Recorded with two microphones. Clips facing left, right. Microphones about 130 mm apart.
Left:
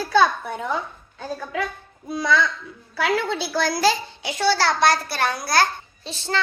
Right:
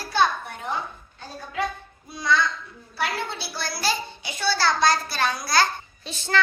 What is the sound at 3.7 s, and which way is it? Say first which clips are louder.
A child's voice: left 6 dB; 90° left.